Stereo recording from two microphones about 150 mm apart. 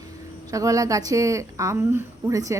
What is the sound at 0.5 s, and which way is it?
A woman's voice, 20° right (ahead or behind).